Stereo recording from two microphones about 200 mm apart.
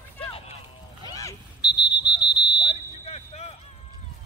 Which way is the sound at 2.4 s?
60° left (ahead or behind).